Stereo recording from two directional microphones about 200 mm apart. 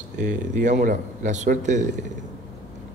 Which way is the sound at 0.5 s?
40° right (ahead or behind).